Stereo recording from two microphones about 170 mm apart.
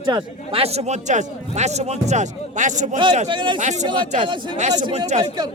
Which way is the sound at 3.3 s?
30° right (ahead or behind).